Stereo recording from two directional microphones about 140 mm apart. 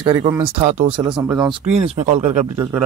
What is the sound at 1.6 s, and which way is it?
Speech, 45° right (ahead or behind).